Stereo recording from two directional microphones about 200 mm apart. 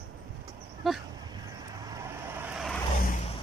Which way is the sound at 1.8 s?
15° right (ahead or behind).